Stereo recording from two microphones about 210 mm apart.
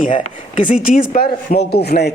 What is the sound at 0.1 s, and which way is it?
A man's voice, 35° left (ahead or behind).